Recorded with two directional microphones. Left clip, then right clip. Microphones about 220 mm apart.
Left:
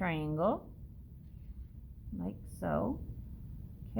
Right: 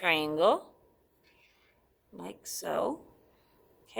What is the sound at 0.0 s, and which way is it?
Speech, 35° right (ahead or behind).